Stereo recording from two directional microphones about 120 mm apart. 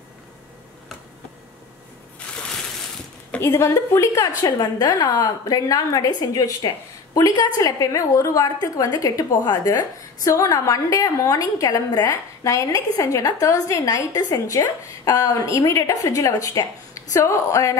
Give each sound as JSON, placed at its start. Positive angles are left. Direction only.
{"t": 3.3, "sound": "a woman's voice", "side_deg": 20}